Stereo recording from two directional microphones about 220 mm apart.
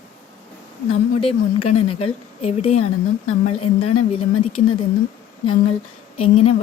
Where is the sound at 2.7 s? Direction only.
90° left.